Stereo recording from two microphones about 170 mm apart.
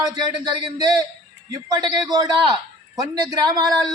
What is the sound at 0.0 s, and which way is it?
A man's voice, 25° right (ahead or behind).